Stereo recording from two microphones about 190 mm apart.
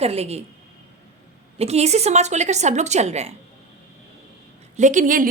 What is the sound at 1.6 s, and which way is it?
A woman's voice, 35° right (ahead or behind).